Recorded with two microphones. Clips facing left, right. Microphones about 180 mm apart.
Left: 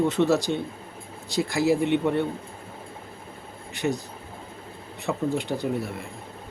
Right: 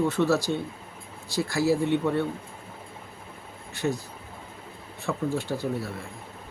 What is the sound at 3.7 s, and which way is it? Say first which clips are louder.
Speech: left 1 dB; 15° left (ahead or behind).